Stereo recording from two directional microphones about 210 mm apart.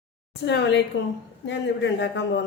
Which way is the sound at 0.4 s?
55° left (ahead or behind).